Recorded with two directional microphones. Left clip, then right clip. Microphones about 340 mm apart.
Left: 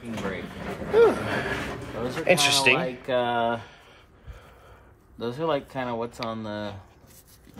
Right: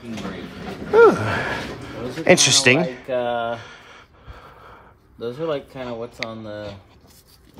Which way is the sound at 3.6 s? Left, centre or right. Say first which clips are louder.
Right 7 dB; right.